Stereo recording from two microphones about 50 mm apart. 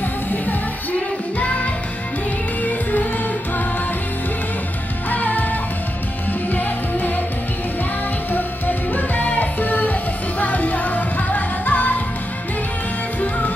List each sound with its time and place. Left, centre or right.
1.4 s music: left
5.1 s music: left
8.3 s music: left